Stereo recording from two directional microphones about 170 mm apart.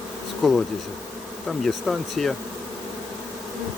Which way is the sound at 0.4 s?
Centre (ahead or behind).